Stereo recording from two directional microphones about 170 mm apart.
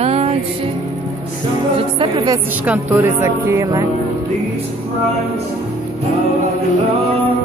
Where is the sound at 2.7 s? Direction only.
10° right (ahead or behind).